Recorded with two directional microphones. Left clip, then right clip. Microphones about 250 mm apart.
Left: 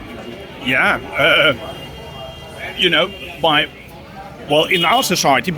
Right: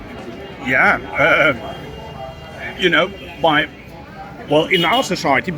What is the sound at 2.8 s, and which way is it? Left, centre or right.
Speech, left.